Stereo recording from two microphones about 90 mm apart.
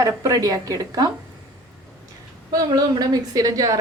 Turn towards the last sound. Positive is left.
turn(degrees=-40)  # may be behind; listen again after turning